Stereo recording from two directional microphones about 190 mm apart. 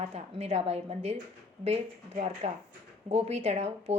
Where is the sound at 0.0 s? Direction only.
35° right (ahead or behind).